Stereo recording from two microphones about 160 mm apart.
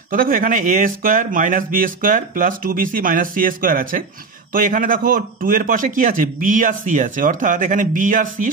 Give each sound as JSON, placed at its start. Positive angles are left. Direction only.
{"t": 0.1, "sound": "speech", "side_deg": -60}